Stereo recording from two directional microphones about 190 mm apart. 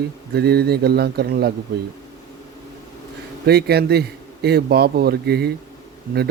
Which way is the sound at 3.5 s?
55° right (ahead or behind).